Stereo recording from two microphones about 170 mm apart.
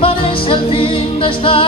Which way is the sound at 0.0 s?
30° left (ahead or behind).